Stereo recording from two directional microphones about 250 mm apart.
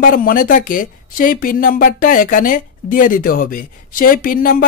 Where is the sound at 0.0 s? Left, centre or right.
Left.